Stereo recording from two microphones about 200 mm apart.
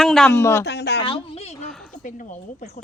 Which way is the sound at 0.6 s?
55° left (ahead or behind).